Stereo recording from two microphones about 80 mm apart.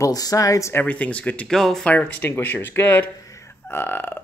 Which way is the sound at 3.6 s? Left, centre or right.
Left.